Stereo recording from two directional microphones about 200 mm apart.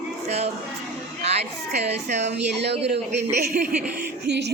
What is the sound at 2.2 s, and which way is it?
A woman's voice, 55° right (ahead or behind).